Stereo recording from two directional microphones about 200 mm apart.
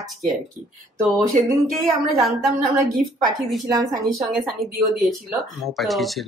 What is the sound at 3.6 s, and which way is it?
Speech, 20° right (ahead or behind).